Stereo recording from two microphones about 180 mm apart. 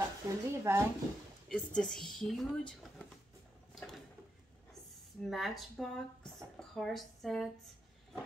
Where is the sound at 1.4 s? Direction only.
5° left (ahead or behind).